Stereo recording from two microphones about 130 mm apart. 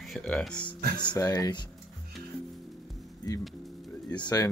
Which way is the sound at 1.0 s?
30° left (ahead or behind).